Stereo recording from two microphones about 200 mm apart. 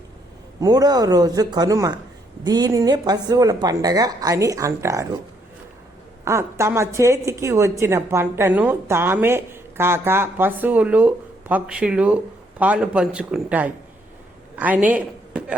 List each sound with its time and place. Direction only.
0.6 s a woman's voice: 20° right (ahead or behind)
6.2 s a woman's voice: 15° right (ahead or behind)